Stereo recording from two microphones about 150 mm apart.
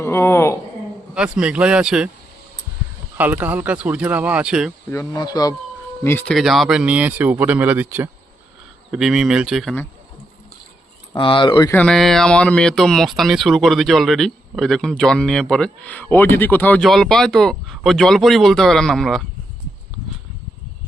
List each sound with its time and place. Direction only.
0.0 s a woman's voice: 15° left (ahead or behind)
1.1 s speech: 5° right (ahead or behind)
3.2 s speech: 10° right (ahead or behind)
4.9 s speech: 25° left (ahead or behind)
6.0 s speech: 15° left (ahead or behind)
6.3 s speech: centre (ahead or behind)
8.9 s speech: 5° right (ahead or behind)
11.1 s speech: 35° left (ahead or behind)
11.7 s speech: 5° left (ahead or behind)
16.8 s speech: centre (ahead or behind)